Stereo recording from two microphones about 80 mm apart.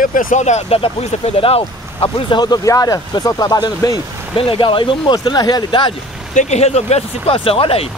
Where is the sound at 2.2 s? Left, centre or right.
Left.